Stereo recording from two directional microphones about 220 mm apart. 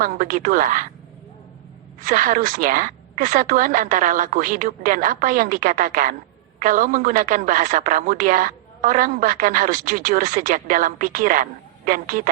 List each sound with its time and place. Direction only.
0.0 s a man's voice: 40° right (ahead or behind)
2.0 s a man's voice: 35° right (ahead or behind)